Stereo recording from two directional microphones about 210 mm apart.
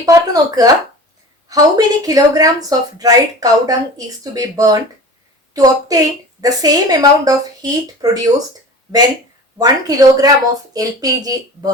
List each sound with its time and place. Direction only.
0.0 s speech: 15° right (ahead or behind)
9.6 s speech: 15° right (ahead or behind)